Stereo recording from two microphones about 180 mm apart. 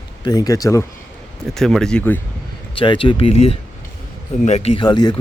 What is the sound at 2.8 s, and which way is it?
Speech, 30° left (ahead or behind).